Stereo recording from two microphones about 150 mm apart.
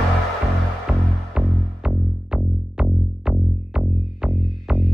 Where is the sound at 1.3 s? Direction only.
5° right (ahead or behind).